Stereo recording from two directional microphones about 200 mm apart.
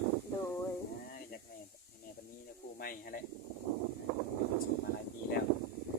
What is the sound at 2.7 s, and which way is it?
Speech, 45° left (ahead or behind).